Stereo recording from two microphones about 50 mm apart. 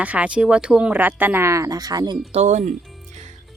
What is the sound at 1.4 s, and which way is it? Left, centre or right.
Speech, right.